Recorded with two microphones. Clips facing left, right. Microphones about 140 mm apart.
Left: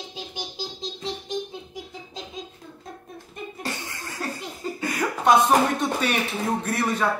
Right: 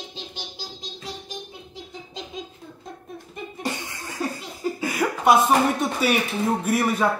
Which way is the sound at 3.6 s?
15° right (ahead or behind).